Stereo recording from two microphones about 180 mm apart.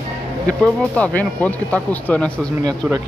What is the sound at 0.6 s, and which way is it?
Speech, 5° left (ahead or behind).